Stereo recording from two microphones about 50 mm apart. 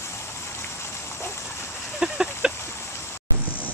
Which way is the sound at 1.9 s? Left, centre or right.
Centre.